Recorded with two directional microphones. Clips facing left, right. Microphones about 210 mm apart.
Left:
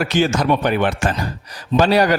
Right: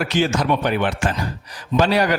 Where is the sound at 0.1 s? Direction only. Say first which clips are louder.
Left 2 dB; 45° left (ahead or behind).